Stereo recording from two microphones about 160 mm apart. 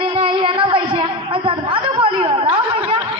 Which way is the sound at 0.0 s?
35° right (ahead or behind).